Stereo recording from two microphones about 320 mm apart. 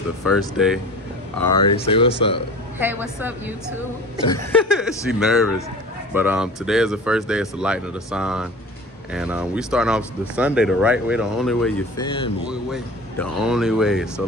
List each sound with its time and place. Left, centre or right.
0.2 s speech: centre
1.4 s speech: centre
2.8 s speech: centre
4.3 s speech: centre
5.0 s speech: centre
12.0 s speech: centre
12.4 s speech: centre